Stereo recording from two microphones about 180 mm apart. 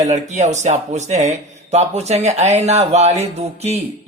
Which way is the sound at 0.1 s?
40° right (ahead or behind).